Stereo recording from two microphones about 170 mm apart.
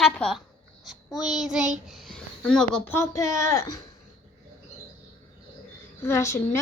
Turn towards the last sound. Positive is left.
turn(degrees=15)  # may be behind; listen again after turning